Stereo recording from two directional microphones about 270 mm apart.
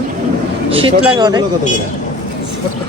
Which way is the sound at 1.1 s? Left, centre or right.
Centre.